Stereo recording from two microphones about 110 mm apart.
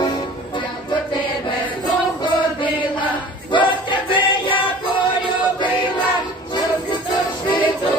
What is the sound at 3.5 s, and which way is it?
Music, 45° left (ahead or behind).